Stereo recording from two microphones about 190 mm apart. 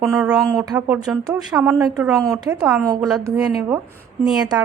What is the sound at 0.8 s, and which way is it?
A woman's voice, 5° right (ahead or behind).